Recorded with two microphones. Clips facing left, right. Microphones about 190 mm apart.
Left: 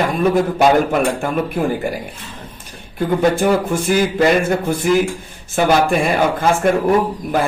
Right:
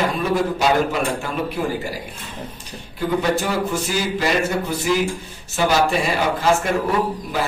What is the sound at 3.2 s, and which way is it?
A man's voice, 50° left (ahead or behind).